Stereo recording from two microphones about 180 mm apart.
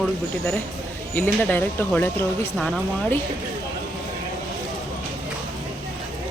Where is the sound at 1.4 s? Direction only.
10° left (ahead or behind).